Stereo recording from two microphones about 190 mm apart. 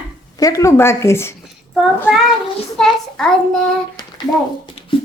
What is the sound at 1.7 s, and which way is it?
Speech, 5° right (ahead or behind).